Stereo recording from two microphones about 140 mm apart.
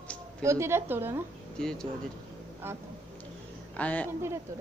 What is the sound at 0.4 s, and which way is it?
Speech, 20° right (ahead or behind).